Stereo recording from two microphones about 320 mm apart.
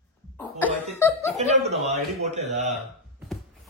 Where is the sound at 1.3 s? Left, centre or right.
Right.